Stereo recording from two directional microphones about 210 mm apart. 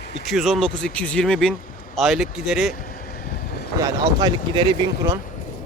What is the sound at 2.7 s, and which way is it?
Vehicle, 45° left (ahead or behind).